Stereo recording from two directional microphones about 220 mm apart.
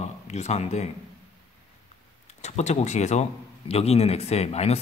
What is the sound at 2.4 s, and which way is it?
A man's voice, 30° left (ahead or behind).